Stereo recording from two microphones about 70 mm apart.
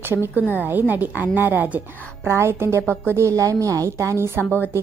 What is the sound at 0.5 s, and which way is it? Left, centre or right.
A woman's voice, right.